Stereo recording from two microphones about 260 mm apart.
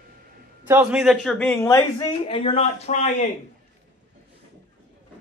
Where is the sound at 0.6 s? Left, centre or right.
Centre; by 3.2 s left.